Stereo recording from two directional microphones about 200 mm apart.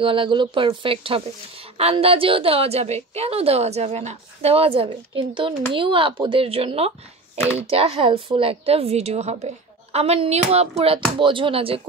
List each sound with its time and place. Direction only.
0.0 s a woman's voice: 25° right (ahead or behind)